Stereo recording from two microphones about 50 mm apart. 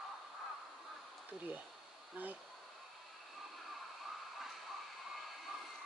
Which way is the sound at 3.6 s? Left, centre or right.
Centre.